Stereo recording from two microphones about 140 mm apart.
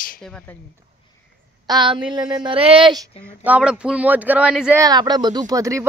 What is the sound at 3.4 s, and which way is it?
Speech, 10° right (ahead or behind).